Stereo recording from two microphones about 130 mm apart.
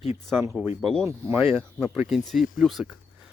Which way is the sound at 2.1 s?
Centre (ahead or behind).